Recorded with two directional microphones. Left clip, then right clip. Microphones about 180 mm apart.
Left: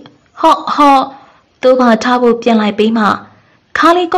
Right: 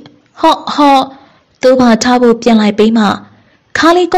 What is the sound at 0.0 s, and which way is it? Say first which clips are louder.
A woman's voice: even; 35° right (ahead or behind).